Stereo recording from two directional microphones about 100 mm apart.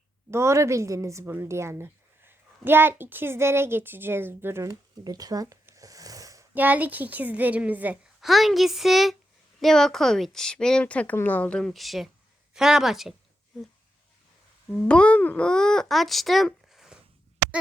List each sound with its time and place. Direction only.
0.3 s a woman's voice: 25° right (ahead or behind)
5.0 s speech: 40° right (ahead or behind)
5.7 s a sound: 35° right (ahead or behind)
6.5 s a woman's voice: 20° right (ahead or behind)
8.2 s speech: centre (ahead or behind)
14.8 s speech: 10° left (ahead or behind)